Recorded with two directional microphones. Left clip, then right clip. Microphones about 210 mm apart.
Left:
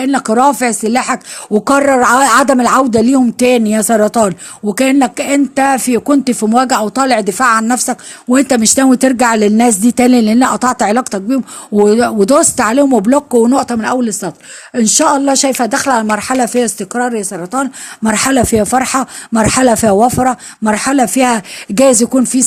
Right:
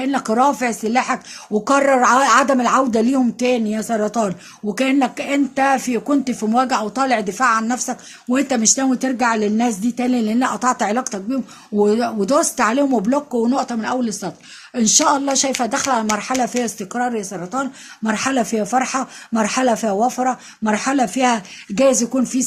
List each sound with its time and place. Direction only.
0.0 s speech: 30° left (ahead or behind)